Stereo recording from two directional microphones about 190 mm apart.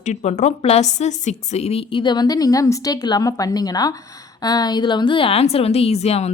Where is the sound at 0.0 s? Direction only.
35° left (ahead or behind).